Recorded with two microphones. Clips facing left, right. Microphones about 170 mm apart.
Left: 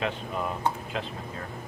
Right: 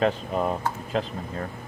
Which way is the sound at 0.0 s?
40° right (ahead or behind).